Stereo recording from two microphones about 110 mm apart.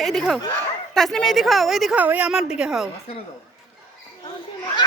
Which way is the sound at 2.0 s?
15° right (ahead or behind).